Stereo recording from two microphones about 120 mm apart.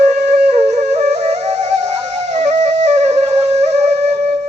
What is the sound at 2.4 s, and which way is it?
Flute, 70° right (ahead or behind).